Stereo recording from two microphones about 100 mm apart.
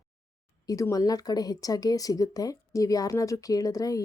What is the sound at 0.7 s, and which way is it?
Speech, 35° left (ahead or behind).